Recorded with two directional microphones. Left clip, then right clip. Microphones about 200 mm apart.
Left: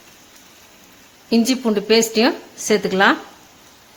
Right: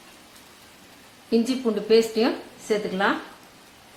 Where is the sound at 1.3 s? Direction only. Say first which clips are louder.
Left 5 dB; 45° left (ahead or behind).